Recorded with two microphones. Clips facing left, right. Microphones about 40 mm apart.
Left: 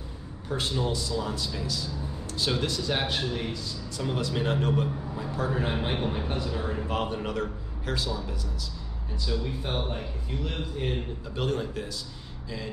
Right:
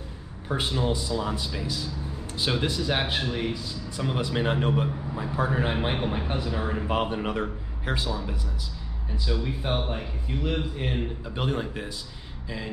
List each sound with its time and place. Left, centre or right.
0.5 s a man's voice: centre
9.1 s a man's voice: centre